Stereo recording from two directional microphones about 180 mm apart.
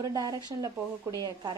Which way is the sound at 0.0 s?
20° right (ahead or behind).